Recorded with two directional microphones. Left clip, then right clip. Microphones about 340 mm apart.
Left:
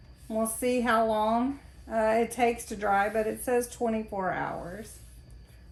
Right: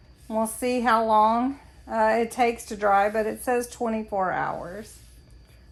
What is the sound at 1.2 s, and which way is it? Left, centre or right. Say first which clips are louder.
Speech: right 5 dB; centre.